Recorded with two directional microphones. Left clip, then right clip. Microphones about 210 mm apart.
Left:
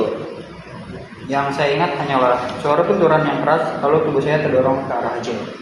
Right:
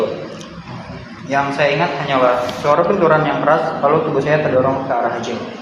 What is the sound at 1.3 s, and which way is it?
Speech, 20° right (ahead or behind).